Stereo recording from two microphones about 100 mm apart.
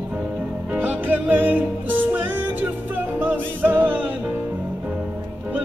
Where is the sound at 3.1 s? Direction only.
15° right (ahead or behind).